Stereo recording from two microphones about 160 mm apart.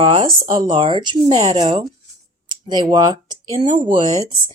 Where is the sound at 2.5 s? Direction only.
30° right (ahead or behind).